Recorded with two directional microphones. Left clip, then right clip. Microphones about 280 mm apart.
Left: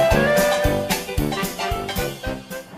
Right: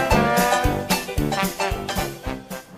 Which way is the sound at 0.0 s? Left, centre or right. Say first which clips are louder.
Left 2 dB; centre.